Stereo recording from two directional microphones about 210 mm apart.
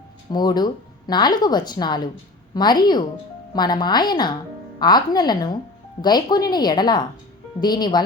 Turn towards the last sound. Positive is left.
turn(degrees=20)  # may be behind; listen again after turning